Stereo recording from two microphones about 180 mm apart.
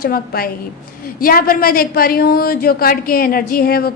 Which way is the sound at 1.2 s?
55° left (ahead or behind).